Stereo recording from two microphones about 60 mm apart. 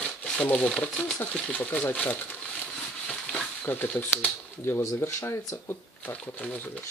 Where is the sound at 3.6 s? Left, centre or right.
Left.